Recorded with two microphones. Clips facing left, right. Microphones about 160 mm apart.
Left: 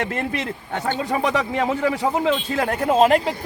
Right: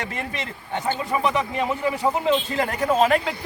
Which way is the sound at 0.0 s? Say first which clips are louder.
Left 5 dB; 60° left (ahead or behind).